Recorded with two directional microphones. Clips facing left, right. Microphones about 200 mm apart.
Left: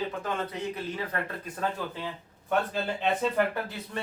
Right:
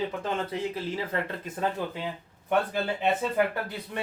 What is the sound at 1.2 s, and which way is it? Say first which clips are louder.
Speech: right 2 dB; 25° right (ahead or behind).